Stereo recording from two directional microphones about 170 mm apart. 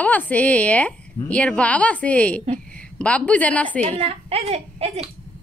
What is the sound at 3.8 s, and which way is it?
A woman's voice, 40° right (ahead or behind).